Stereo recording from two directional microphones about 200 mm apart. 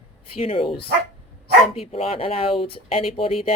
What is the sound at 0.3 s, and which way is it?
Speech, 30° left (ahead or behind).